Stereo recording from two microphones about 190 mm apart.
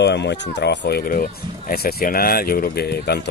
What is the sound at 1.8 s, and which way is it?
Speech, 50° left (ahead or behind).